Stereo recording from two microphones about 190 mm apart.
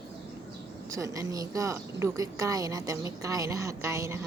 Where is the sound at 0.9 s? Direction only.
15° right (ahead or behind).